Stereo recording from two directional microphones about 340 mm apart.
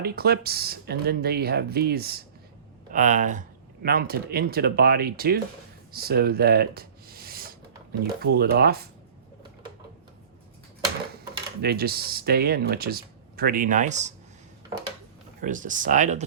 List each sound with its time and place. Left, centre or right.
0.0 s speech: right
11.6 s speech: right
15.4 s speech: right